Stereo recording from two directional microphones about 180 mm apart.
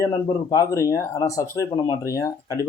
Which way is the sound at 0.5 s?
20° left (ahead or behind).